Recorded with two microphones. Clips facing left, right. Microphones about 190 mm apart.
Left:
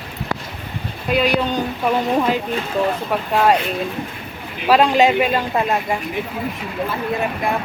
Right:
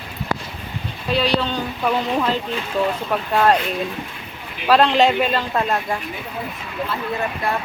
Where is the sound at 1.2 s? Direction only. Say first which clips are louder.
Left 2 dB; 15° left (ahead or behind).